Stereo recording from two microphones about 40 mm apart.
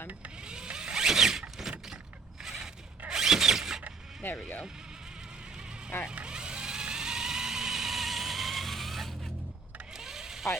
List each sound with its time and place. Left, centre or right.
0.4 s power windows: right
2.4 s mechanisms: centre
3.1 s zipper: centre
4.2 s speech: left
6.2 s a sound: right; by 9.1 s centre
9.9 s a sound: centre